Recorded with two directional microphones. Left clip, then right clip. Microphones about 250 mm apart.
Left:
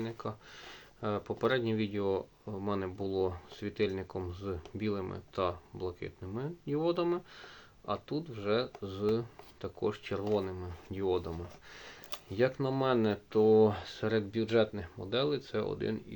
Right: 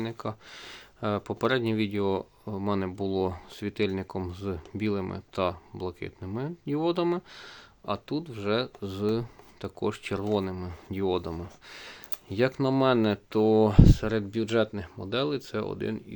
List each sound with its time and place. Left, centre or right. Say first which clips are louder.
0.0 s speech: right 5 dB; right